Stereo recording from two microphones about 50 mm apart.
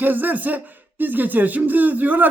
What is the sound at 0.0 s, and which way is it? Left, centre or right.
Speech, right.